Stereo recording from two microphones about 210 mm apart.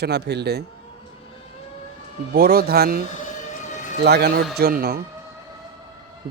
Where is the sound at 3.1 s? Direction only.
35° left (ahead or behind).